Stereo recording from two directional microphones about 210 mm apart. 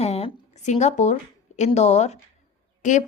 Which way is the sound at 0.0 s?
30° left (ahead or behind).